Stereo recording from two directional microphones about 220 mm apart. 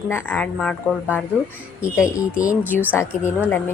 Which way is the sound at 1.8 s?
10° left (ahead or behind).